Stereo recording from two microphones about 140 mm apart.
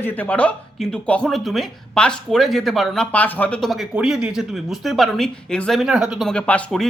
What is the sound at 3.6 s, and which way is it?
Speech, centre (ahead or behind).